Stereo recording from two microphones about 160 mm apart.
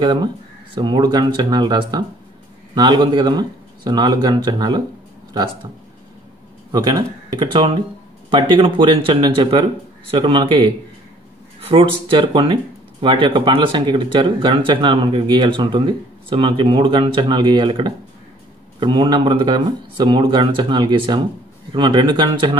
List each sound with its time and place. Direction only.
0.0 s speech: 25° right (ahead or behind)
6.7 s speech: 25° right (ahead or behind)